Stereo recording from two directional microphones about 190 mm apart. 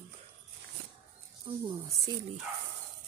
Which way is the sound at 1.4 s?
25° right (ahead or behind).